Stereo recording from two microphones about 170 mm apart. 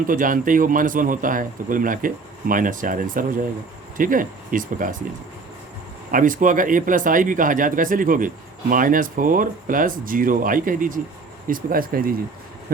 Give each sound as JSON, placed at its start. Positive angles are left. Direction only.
{"t": 0.1, "sound": "speech", "side_deg": -50}
{"t": 6.1, "sound": "speech", "side_deg": -50}